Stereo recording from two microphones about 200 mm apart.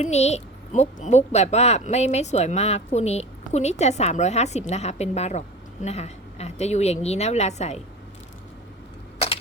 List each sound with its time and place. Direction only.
0.0 s a woman's voice: 35° left (ahead or behind)